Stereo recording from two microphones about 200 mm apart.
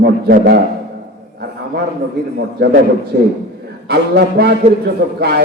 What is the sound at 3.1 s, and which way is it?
A man's voice, 55° right (ahead or behind).